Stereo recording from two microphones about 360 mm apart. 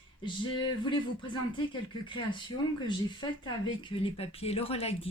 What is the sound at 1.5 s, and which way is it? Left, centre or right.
Speech, centre.